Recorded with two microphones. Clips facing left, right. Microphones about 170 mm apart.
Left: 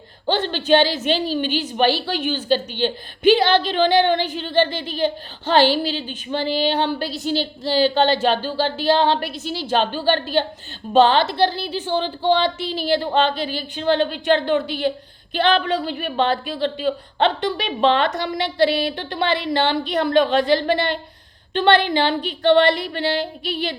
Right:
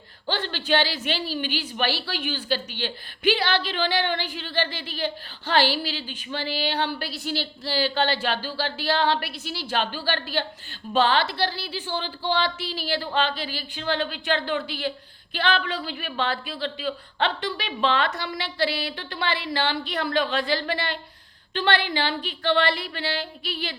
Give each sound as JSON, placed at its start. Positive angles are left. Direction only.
{"t": 0.3, "sound": "a woman's voice", "side_deg": 20}